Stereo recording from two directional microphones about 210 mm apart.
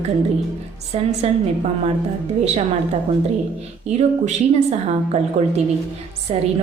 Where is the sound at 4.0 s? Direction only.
30° right (ahead or behind).